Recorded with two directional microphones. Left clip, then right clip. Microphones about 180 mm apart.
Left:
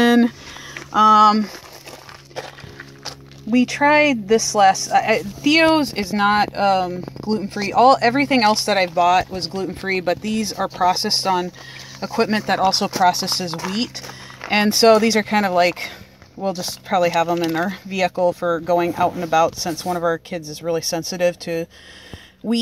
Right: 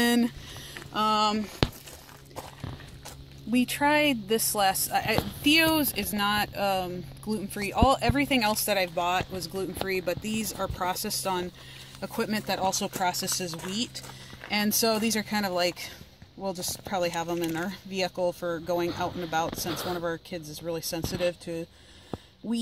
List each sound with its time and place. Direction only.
0.0 s a sound: 25° left (ahead or behind)
0.9 s speech: 30° left (ahead or behind)
3.0 s speech: 15° left (ahead or behind)